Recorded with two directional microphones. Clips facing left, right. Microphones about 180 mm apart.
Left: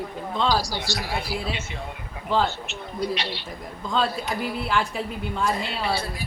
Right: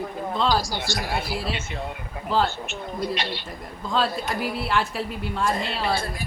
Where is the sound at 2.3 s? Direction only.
Centre (ahead or behind).